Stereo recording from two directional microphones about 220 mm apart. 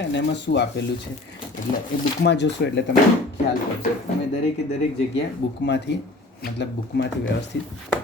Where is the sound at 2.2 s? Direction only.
50° left (ahead or behind).